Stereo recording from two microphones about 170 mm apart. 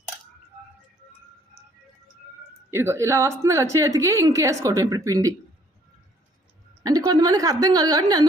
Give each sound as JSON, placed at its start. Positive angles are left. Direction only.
{"t": 2.6, "sound": "a woman's voice", "side_deg": -15}
{"t": 6.8, "sound": "a woman's voice", "side_deg": -20}